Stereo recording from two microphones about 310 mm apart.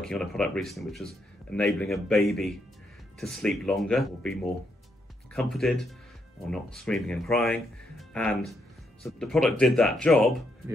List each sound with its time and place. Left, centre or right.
0.0 s speech: centre